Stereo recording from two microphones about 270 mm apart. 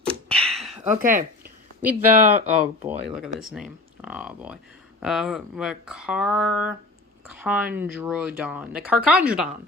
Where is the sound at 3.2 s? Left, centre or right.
Centre.